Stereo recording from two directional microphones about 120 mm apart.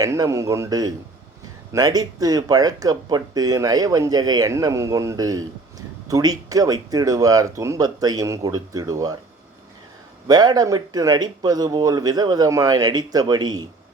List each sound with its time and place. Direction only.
0.0 s a man's voice: 25° right (ahead or behind)
10.2 s speech: 35° right (ahead or behind)